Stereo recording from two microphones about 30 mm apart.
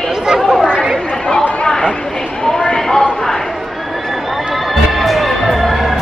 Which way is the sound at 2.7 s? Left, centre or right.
Centre.